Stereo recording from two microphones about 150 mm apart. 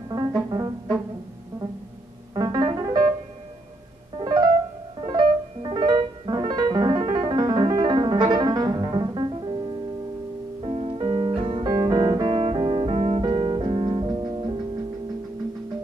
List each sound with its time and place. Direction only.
0.5 s music: 25° right (ahead or behind)
2.3 s piano: 25° right (ahead or behind)
4.2 s piano: 25° right (ahead or behind)
10.6 s music: 35° right (ahead or behind)